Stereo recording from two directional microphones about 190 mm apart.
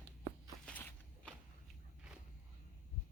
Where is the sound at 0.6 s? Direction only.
5° left (ahead or behind).